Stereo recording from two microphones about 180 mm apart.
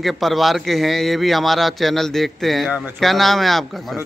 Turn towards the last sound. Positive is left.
turn(degrees=0)  # may be behind; listen again after turning